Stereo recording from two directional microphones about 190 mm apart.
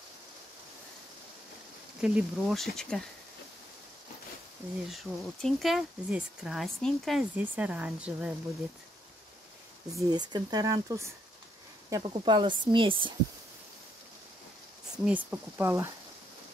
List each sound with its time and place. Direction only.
2.0 s speech: 5° right (ahead or behind)
4.8 s speech: centre (ahead or behind)
9.9 s speech: 20° right (ahead or behind)
15.0 s speech: 10° right (ahead or behind)